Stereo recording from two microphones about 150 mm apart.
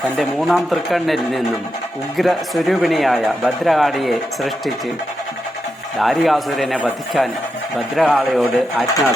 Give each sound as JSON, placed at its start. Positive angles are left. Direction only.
{"t": 0.2, "sound": "speech", "side_deg": 0}
{"t": 6.0, "sound": "speech", "side_deg": 0}